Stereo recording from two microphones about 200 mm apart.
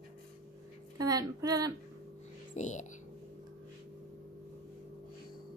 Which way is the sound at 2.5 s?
35° left (ahead or behind).